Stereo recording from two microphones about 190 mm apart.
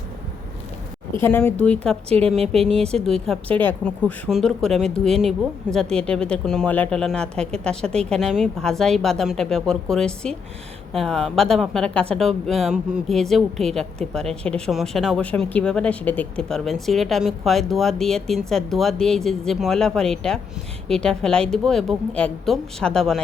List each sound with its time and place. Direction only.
1.2 s a woman's voice: 10° left (ahead or behind)
2.0 s a woman's voice: 30° right (ahead or behind)
3.0 s speech: centre (ahead or behind)